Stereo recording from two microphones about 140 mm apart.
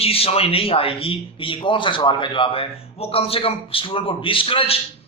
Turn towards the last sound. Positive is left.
turn(degrees=40)  # may be behind; listen again after turning